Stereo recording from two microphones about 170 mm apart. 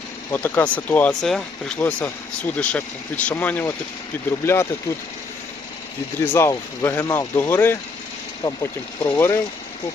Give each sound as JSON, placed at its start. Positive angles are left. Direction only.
{"t": 0.3, "sound": "speech", "side_deg": 10}
{"t": 6.1, "sound": "speech", "side_deg": 15}